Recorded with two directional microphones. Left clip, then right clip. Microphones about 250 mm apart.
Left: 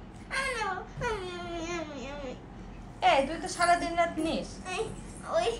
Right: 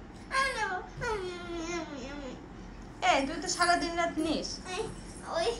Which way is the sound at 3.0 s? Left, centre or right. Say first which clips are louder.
Left 3 dB; centre.